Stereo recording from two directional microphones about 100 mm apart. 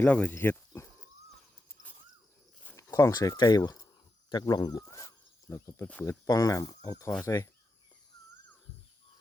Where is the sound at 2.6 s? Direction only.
25° left (ahead or behind).